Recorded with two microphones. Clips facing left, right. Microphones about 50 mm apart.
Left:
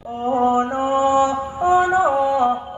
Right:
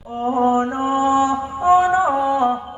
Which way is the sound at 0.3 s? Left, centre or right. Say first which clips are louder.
Even; right.